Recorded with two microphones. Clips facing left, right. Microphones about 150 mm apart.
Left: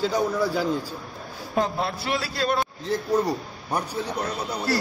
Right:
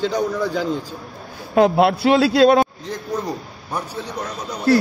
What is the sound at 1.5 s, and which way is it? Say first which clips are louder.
A man's voice: right 11 dB; 75° right (ahead or behind).